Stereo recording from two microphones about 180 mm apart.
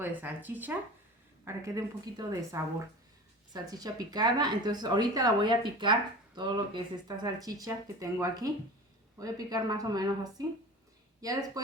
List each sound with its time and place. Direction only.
0.0 s speech: 10° right (ahead or behind)